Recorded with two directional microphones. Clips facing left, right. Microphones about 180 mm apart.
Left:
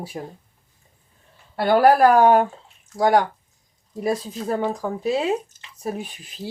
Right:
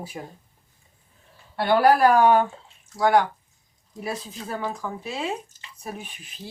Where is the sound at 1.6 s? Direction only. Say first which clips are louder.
Left 3 dB; 40° left (ahead or behind).